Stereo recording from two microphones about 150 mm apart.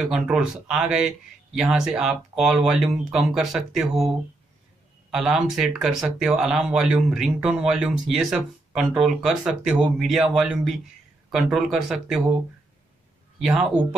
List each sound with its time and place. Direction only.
0.0 s speech: 5° right (ahead or behind)
5.1 s speech: 5° right (ahead or behind)
13.4 s speech: centre (ahead or behind)